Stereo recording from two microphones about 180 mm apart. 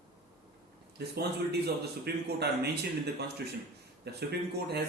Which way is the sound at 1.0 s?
65° right (ahead or behind).